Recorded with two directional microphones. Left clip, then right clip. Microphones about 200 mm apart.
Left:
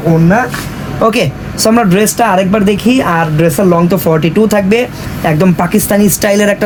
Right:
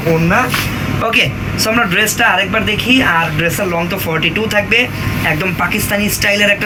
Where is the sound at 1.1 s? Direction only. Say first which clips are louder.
Left 1 dB; 65° left (ahead or behind).